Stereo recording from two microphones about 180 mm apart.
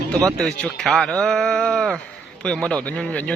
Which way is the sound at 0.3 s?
5° left (ahead or behind).